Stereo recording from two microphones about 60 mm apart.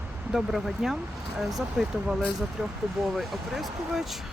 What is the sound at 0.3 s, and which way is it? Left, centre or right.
Speech, centre.